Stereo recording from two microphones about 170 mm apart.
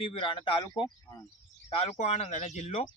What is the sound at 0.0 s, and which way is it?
A man's voice, 30° left (ahead or behind).